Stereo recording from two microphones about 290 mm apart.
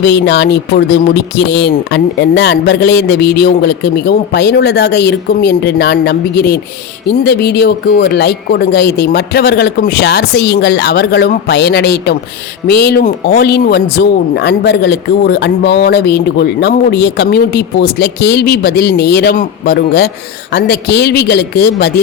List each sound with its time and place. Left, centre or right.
0.0 s speech: left